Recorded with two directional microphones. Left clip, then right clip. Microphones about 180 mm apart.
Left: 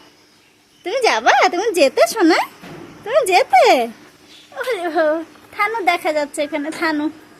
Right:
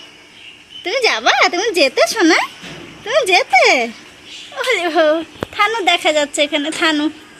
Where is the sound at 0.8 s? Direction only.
5° left (ahead or behind).